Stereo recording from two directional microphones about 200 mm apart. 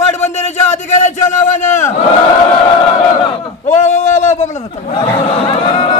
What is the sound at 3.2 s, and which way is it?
Battle cry, 25° left (ahead or behind).